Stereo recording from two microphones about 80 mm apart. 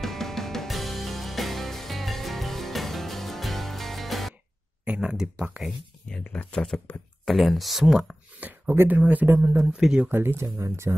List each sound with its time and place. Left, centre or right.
0.0 s music: centre
4.8 s speech: centre
6.0 s speech: centre
8.4 s speech: right
9.7 s speech: centre
10.0 s speech: right